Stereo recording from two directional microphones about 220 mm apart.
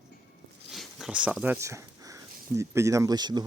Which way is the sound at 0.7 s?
Centre (ahead or behind).